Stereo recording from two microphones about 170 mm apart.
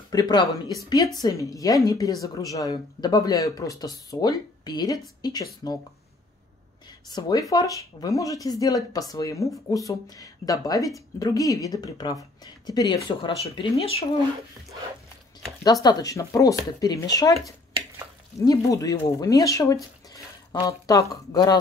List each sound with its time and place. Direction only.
0.1 s speech: 25° left (ahead or behind)
7.1 s speech: 25° left (ahead or behind)
13.4 s speech: 35° left (ahead or behind)
15.6 s speech: 25° left (ahead or behind)